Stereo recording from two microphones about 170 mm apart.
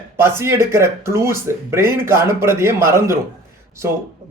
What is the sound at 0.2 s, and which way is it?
Speech, 15° right (ahead or behind).